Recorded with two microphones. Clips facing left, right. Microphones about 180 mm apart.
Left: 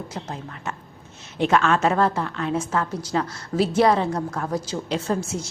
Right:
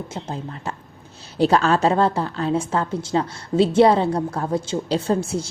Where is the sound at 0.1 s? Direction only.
25° right (ahead or behind).